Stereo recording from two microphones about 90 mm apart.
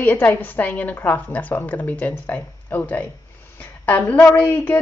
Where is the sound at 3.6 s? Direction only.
15° left (ahead or behind).